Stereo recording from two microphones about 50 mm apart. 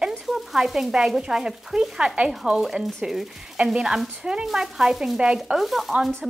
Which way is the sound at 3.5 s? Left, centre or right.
Centre.